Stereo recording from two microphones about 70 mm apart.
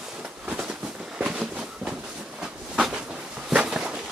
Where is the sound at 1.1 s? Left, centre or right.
Centre.